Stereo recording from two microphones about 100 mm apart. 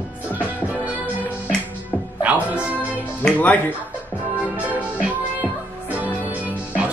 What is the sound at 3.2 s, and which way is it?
Speech, 15° left (ahead or behind).